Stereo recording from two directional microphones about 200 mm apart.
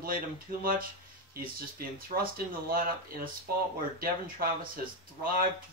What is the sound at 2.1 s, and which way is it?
Speech, 45° right (ahead or behind).